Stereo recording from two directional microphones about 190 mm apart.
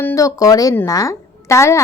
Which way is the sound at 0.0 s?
15° left (ahead or behind).